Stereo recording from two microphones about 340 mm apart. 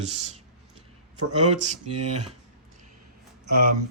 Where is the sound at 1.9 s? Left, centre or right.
Right.